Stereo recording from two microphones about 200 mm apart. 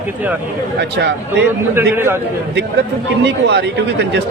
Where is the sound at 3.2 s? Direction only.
60° right (ahead or behind).